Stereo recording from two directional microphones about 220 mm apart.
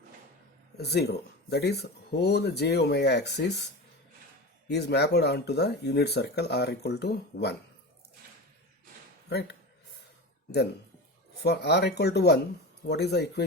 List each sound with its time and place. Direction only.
0.8 s speech: 50° left (ahead or behind)
4.7 s speech: 50° left (ahead or behind)
11.4 s speech: 50° left (ahead or behind)